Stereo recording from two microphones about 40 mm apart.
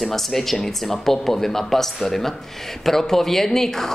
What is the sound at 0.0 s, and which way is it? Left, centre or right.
Speech, centre.